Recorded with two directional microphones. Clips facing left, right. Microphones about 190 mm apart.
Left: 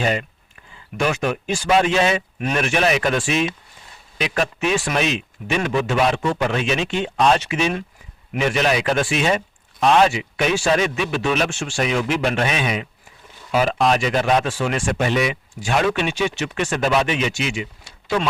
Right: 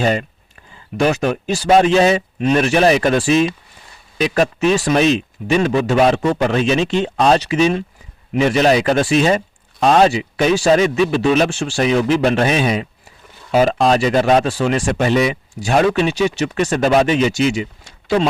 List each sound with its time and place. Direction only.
0.0 s speech: 35° right (ahead or behind)